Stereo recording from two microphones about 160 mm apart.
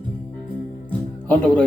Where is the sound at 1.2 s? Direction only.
5° left (ahead or behind).